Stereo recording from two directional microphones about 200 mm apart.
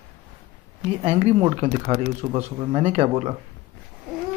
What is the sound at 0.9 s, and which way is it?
Speech, 30° right (ahead or behind).